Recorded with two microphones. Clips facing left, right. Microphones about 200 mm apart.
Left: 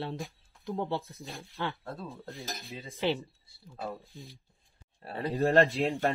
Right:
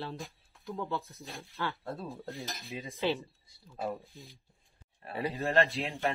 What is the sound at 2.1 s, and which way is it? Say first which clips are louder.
Cutlery: even; 15° right (ahead or behind).